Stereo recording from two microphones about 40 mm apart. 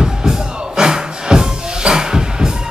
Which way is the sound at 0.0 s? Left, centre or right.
Centre.